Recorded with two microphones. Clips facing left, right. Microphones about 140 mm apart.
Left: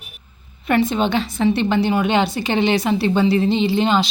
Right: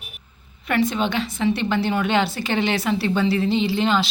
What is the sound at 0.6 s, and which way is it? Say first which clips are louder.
Speech: left 3 dB; 25° left (ahead or behind).